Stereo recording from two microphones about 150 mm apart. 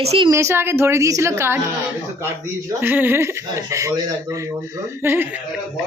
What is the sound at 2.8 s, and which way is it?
Speech, 15° right (ahead or behind).